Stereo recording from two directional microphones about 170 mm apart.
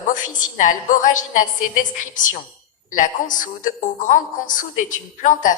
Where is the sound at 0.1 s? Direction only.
50° left (ahead or behind).